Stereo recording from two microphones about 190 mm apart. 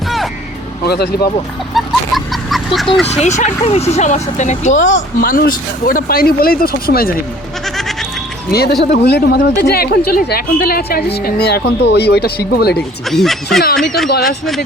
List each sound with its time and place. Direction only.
0.9 s speech: 60° left (ahead or behind)
1.7 s a sound: centre (ahead or behind)
3.1 s speech: 35° left (ahead or behind); by 7.2 s 50° left (ahead or behind)
8.4 s speech: 60° left (ahead or behind)
12.7 s speech: centre (ahead or behind)